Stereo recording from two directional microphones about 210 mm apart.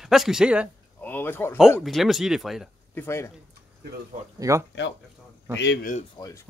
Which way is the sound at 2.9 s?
10° left (ahead or behind).